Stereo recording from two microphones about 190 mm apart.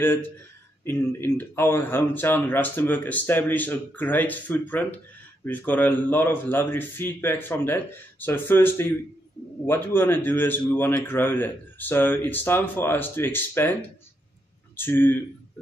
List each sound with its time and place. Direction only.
0.8 s a man's voice: 10° left (ahead or behind)